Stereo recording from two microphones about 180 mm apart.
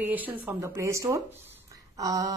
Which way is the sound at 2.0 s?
20° right (ahead or behind).